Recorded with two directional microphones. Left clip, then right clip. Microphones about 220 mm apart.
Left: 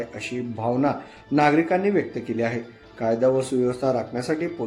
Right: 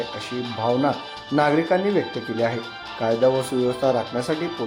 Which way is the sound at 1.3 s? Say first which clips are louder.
Even; centre (ahead or behind).